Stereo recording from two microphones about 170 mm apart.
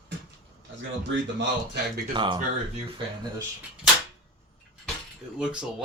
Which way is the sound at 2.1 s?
25° right (ahead or behind).